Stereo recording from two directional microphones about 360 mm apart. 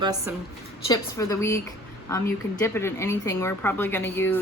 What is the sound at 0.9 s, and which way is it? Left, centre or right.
A woman's voice, centre.